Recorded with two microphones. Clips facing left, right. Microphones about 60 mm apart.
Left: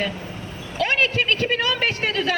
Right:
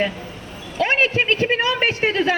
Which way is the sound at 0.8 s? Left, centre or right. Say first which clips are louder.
Right 2 dB; right.